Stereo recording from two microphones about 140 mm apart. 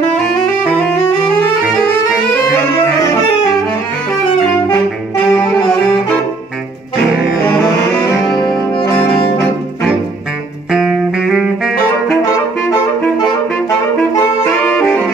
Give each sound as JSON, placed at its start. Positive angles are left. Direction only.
{"t": 5.3, "sound": "saxophone", "side_deg": 5}
{"t": 8.4, "sound": "music", "side_deg": 30}
{"t": 8.9, "sound": "brass instrument", "side_deg": 10}
{"t": 10.7, "sound": "saxophone", "side_deg": -5}
{"t": 13.2, "sound": "saxophone", "side_deg": 25}
{"t": 14.6, "sound": "saxophone", "side_deg": 10}